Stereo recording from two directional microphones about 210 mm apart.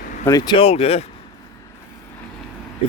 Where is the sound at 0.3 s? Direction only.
20° left (ahead or behind).